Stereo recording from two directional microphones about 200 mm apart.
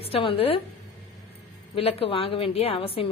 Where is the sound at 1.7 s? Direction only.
30° left (ahead or behind).